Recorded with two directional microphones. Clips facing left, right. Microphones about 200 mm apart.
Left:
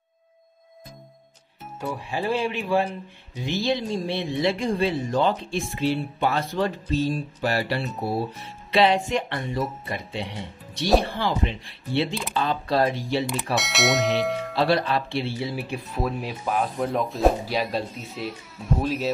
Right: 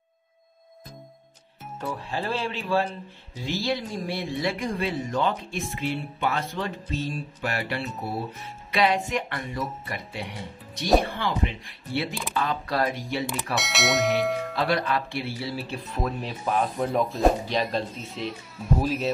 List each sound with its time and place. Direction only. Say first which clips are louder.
1.8 s speech: left 2 dB; 10° left (ahead or behind); by 12.1 s 30° left (ahead or behind)
12.1 s speech: left 3 dB; centre (ahead or behind)
12.4 s speech: left 3 dB; 30° left (ahead or behind)
13.6 s speech: left 1 dB; centre (ahead or behind)
14.5 s speech: left 3 dB; 30° left (ahead or behind); by 19.0 s centre (ahead or behind)